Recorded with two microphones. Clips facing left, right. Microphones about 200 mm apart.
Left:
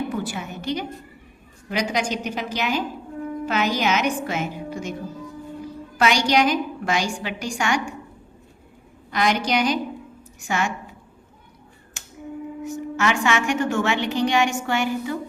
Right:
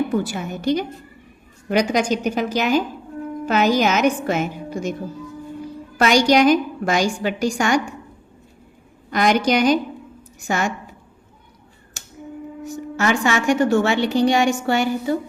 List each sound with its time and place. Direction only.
0.1 s a woman's voice: 40° right (ahead or behind)
6.0 s a woman's voice: 45° right (ahead or behind)
9.0 s a woman's voice: 50° right (ahead or behind)
12.6 s a woman's voice: 35° right (ahead or behind)